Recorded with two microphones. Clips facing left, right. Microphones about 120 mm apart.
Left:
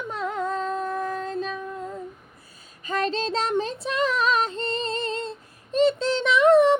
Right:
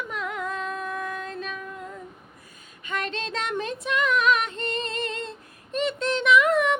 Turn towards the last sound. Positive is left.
turn(degrees=30)  # may be behind; listen again after turning